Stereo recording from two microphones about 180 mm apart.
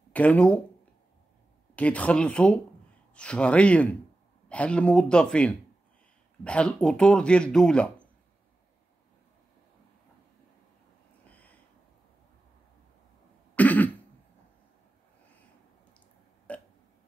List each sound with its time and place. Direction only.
0.1 s speech: 5° left (ahead or behind)
1.8 s speech: 5° left (ahead or behind)
11.2 s a sound: 10° left (ahead or behind)
13.6 s throat clearing: 10° left (ahead or behind)
16.5 s burping: 10° left (ahead or behind)